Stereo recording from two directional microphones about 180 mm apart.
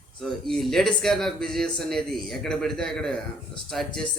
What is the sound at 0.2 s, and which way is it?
Speech, centre (ahead or behind).